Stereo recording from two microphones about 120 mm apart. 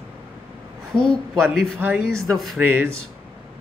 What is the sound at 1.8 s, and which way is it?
Speech, 20° right (ahead or behind).